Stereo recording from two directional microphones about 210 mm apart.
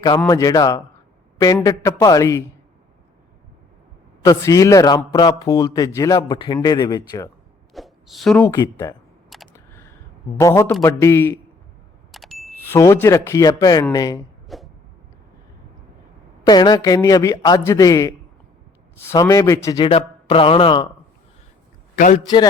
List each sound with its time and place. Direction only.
0.3 s speech: 15° left (ahead or behind)
4.2 s speech: 15° left (ahead or behind)
7.7 s a sound: centre (ahead or behind)
8.4 s speech: 15° left (ahead or behind)
9.3 s a sound: centre (ahead or behind)
10.3 s speech: 15° left (ahead or behind)
12.1 s ding: centre (ahead or behind)
12.6 s speech: 15° left (ahead or behind)
14.4 s a sound: centre (ahead or behind)
16.5 s speech: 20° left (ahead or behind)
19.1 s a man's voice: 15° left (ahead or behind)
21.9 s a man's voice: 40° left (ahead or behind)